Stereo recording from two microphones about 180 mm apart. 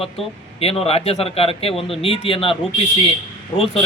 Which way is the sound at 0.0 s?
35° left (ahead or behind).